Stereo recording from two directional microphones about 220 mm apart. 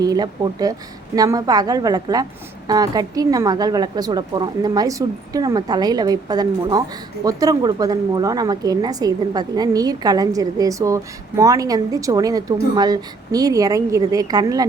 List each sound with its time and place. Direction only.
0.0 s a woman's voice: 15° right (ahead or behind)